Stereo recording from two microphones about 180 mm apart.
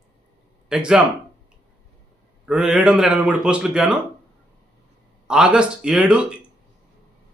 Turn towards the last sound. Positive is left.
turn(degrees=-5)  # may be behind; listen again after turning